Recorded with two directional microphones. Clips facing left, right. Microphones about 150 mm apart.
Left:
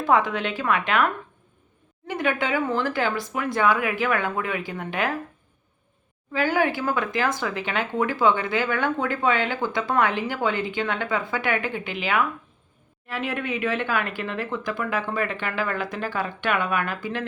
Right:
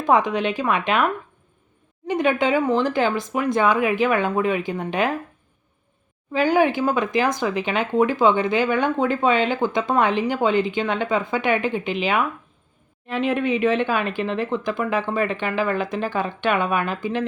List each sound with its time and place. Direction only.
0.0 s speech: 20° right (ahead or behind)
6.3 s speech: 20° right (ahead or behind)